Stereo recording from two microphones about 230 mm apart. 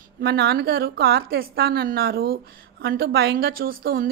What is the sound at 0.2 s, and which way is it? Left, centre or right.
A woman's voice, right.